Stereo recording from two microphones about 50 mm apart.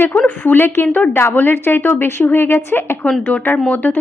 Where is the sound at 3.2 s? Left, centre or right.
Left.